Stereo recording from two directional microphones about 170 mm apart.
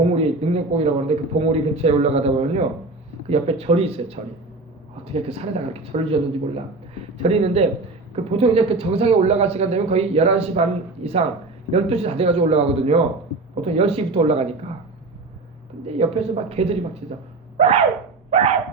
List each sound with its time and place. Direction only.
0.0 s a man's voice: 35° right (ahead or behind)
7.2 s speech: 40° right (ahead or behind)
15.9 s speech: 35° right (ahead or behind)
17.6 s a sound: 40° right (ahead or behind)